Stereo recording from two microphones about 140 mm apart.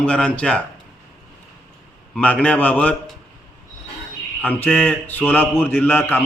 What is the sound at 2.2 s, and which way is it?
Speech, 10° left (ahead or behind).